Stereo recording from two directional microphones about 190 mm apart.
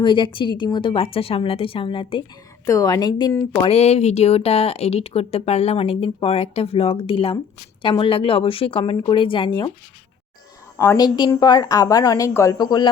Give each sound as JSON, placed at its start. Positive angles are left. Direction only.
{"t": 0.0, "sound": "a woman's voice", "side_deg": 25}
{"t": 3.7, "sound": "a woman's voice", "side_deg": 35}
{"t": 10.8, "sound": "a woman's voice", "side_deg": 15}